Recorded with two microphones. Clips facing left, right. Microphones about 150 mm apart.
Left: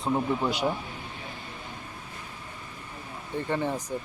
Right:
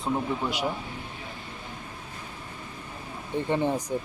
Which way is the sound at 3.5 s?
15° right (ahead or behind).